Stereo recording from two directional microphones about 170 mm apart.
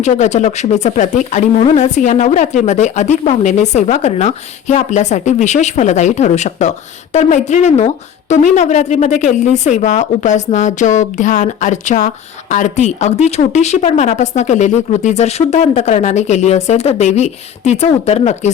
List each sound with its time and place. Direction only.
0.0 s speech: 45° left (ahead or behind)